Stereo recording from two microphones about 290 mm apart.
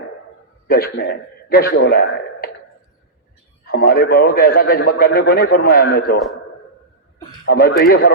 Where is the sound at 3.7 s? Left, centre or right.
Left.